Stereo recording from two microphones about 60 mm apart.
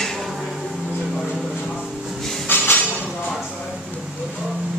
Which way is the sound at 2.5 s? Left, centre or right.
Left.